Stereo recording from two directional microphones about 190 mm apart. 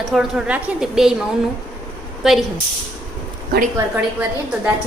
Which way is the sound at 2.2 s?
Centre (ahead or behind).